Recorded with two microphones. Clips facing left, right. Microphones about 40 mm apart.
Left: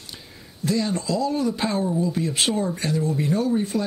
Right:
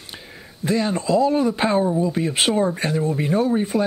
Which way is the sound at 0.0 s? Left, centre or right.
Right.